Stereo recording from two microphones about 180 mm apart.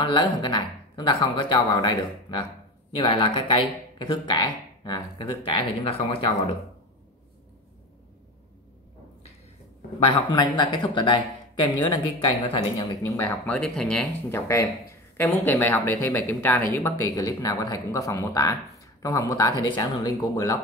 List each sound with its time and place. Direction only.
0.0 s speech: 25° left (ahead or behind)
10.1 s speech: 25° left (ahead or behind)
13.6 s speech: 5° left (ahead or behind)
14.3 s speech: 15° left (ahead or behind)